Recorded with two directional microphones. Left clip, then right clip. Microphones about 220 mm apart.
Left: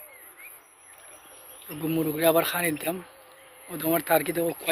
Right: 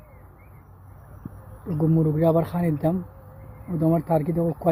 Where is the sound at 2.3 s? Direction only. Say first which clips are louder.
Even; centre (ahead or behind).